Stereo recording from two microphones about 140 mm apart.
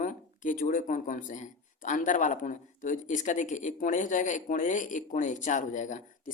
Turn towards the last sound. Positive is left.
turn(degrees=60)  # may be behind; listen again after turning